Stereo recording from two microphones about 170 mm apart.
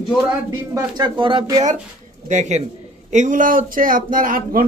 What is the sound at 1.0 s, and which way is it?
Speech, 30° right (ahead or behind).